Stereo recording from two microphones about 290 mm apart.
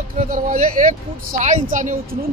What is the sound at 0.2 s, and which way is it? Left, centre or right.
A woman's voice, right.